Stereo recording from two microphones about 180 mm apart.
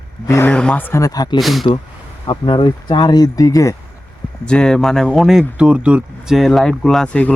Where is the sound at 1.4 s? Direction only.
Centre (ahead or behind).